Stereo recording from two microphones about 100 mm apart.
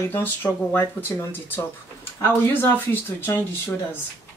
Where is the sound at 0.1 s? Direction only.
20° left (ahead or behind).